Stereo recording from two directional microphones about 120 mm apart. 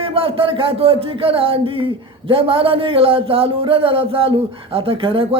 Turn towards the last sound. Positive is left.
turn(degrees=-50)  # may be behind; listen again after turning